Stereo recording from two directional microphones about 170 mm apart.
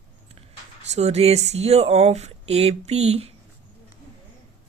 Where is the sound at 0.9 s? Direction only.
40° right (ahead or behind).